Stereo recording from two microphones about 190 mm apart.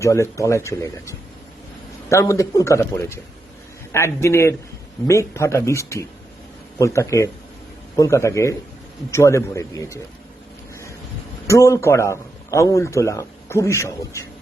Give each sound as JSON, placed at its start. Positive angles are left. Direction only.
{"t": 0.0, "sound": "speech", "side_deg": 15}
{"t": 11.4, "sound": "speech", "side_deg": 15}